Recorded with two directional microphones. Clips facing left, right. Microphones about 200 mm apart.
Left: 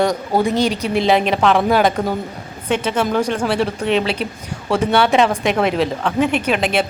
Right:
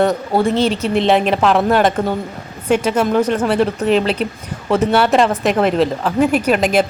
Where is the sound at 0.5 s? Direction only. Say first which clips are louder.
Right 2 dB; 30° right (ahead or behind).